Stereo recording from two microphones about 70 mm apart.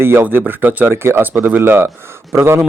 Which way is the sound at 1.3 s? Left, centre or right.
Right.